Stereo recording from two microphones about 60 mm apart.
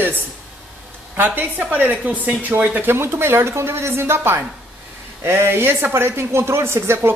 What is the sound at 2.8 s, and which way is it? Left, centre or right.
Speech, right.